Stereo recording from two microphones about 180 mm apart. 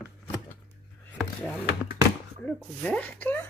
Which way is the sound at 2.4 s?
5° left (ahead or behind).